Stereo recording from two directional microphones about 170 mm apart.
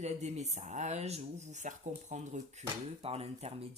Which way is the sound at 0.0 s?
40° right (ahead or behind).